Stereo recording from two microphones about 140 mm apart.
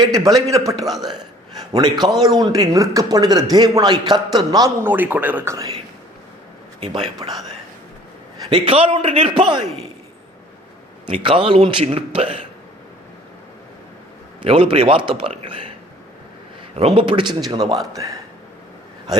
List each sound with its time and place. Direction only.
0.0 s speech: 30° right (ahead or behind)
4.8 s speech: 15° right (ahead or behind)
7.2 s speech: 25° right (ahead or behind)
8.4 s a man's voice: 40° right (ahead or behind)
11.1 s a man's voice: 40° right (ahead or behind)
14.4 s a man's voice: 40° right (ahead or behind)
16.7 s a man's voice: 40° right (ahead or behind); by 18.2 s 25° right (ahead or behind)